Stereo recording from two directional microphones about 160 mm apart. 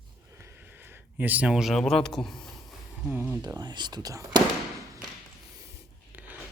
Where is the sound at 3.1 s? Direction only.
10° right (ahead or behind).